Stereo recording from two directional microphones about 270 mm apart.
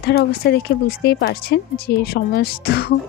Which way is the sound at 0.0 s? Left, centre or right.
Left.